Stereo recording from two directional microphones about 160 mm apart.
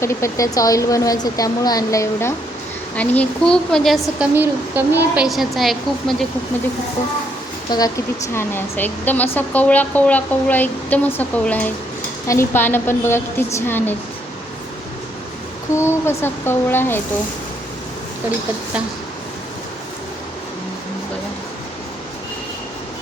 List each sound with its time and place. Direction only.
0.0 s a woman's voice: 15° left (ahead or behind); by 4.3 s centre (ahead or behind)
4.4 s a woman's voice: 10° right (ahead or behind)
7.7 s a woman's voice: 25° left (ahead or behind)
8.3 s speech: 15° left (ahead or behind)
15.7 s speech: 15° left (ahead or behind)